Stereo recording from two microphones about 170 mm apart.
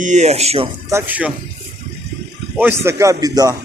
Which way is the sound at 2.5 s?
15° right (ahead or behind).